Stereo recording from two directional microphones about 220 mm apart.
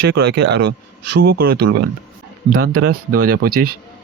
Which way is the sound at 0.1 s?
50° right (ahead or behind).